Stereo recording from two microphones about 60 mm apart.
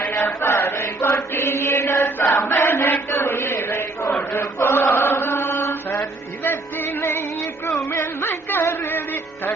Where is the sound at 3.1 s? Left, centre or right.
Left.